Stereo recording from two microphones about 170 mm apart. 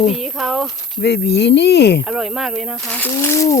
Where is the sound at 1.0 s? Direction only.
80° left.